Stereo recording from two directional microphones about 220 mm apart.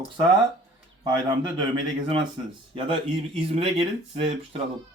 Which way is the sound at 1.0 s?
20° right (ahead or behind).